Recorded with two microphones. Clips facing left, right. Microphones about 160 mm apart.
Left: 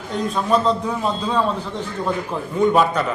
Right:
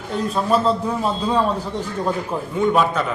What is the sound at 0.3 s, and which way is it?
A man's voice, 5° right (ahead or behind).